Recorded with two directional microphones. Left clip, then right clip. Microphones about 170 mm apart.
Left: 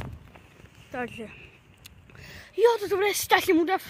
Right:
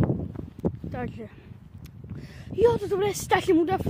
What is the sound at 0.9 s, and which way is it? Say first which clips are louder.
Speech: left 1 dB; 5° right (ahead or behind).